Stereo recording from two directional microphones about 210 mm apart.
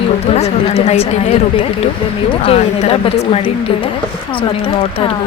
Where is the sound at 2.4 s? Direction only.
30° left (ahead or behind).